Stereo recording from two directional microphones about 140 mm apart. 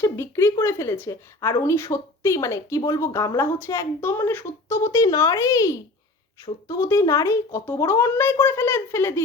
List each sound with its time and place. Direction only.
0.0 s a woman's voice: 20° left (ahead or behind)